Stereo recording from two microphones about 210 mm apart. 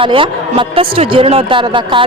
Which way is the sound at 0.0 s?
25° right (ahead or behind).